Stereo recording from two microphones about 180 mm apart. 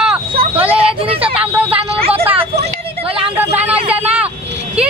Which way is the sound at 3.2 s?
10° right (ahead or behind).